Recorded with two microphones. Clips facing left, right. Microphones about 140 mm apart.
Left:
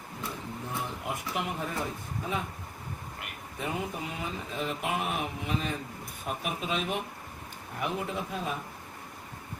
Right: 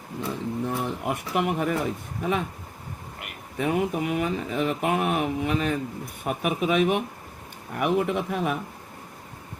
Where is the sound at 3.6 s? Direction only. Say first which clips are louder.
Right 9 dB; 80° right.